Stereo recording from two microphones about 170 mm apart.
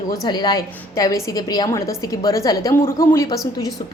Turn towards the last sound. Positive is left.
turn(degrees=20)  # may be behind; listen again after turning